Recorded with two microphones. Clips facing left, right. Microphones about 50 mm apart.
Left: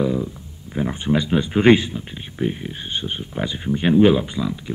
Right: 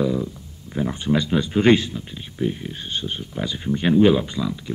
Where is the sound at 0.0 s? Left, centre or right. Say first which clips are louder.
Left 1 dB; centre.